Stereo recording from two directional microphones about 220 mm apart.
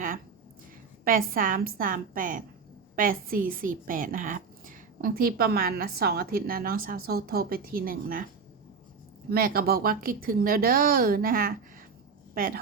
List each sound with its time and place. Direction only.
1.0 s speech: 40° right (ahead or behind)
9.3 s speech: 40° right (ahead or behind)